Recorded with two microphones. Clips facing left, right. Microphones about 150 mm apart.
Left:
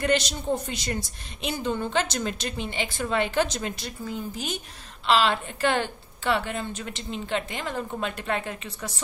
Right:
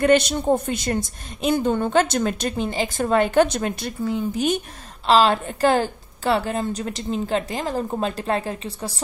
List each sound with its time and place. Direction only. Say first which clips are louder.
0.0 s a woman's voice: right 8 dB; 55° right (ahead or behind)
5.0 s a woman's voice: right 5 dB; 40° right (ahead or behind)